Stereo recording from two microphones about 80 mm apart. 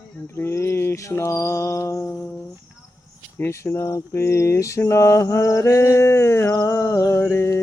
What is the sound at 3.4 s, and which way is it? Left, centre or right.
Speech, left.